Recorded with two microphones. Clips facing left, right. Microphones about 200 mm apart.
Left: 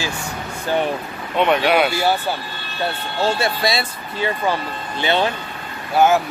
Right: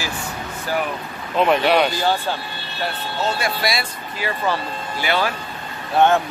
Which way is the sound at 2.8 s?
25° left (ahead or behind).